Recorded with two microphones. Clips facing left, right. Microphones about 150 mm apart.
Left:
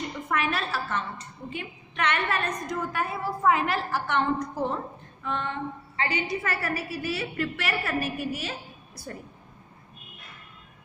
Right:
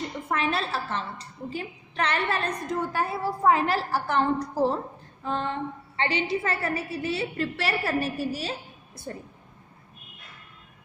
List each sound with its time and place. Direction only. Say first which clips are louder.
0.3 s a woman's voice: right 1 dB; 30° right (ahead or behind)